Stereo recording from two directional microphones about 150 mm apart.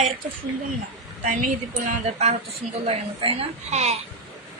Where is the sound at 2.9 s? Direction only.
40° right (ahead or behind).